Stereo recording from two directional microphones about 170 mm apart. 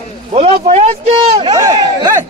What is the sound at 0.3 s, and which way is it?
Speech, 35° right (ahead or behind).